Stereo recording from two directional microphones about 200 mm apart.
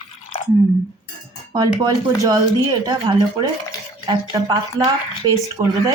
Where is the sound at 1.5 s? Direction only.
20° right (ahead or behind).